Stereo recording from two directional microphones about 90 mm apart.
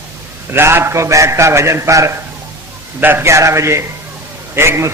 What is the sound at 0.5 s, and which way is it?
A man's voice, 25° right (ahead or behind).